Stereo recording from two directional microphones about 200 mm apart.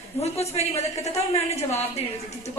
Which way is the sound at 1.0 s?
30° left (ahead or behind).